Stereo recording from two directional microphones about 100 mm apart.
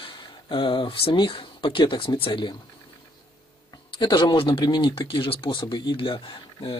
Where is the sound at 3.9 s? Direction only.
50° left (ahead or behind).